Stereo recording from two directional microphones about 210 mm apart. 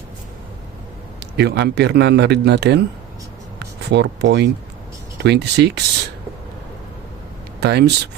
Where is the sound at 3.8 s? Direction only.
55° right (ahead or behind).